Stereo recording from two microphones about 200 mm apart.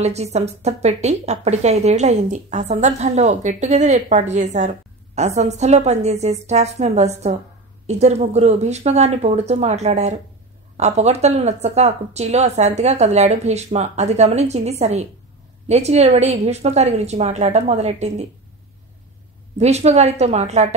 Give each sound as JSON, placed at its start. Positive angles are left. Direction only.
{"t": 0.0, "sound": "a woman's voice", "side_deg": -30}
{"t": 19.6, "sound": "a woman's voice", "side_deg": -35}